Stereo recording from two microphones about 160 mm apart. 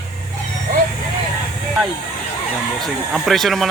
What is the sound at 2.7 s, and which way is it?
Speech, centre (ahead or behind).